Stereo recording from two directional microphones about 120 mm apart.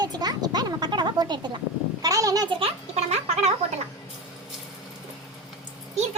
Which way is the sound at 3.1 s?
60° right (ahead or behind).